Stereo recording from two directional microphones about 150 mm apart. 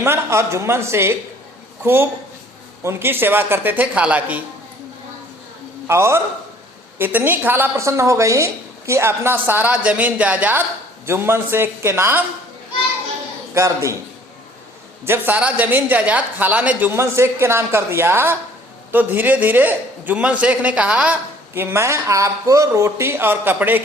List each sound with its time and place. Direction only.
0.0 s a woman's voice: 15° right (ahead or behind)
5.9 s a woman's voice: 20° right (ahead or behind)
13.5 s a man's voice: 20° right (ahead or behind)
15.0 s a woman's voice: 15° right (ahead or behind)